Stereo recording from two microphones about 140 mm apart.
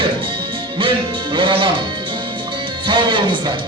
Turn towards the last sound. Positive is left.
turn(degrees=-35)  # may be behind; listen again after turning